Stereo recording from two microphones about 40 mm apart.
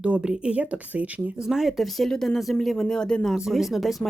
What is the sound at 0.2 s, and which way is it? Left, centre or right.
Speech, centre.